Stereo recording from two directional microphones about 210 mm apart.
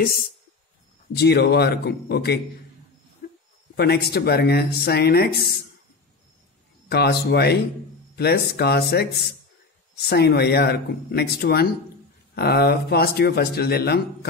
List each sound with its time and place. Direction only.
0.0 s speech: 45° left (ahead or behind)
3.7 s speech: 50° left (ahead or behind)
6.9 s speech: 50° left (ahead or behind)